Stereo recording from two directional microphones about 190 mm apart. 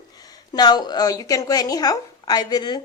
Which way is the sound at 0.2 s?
20° left (ahead or behind).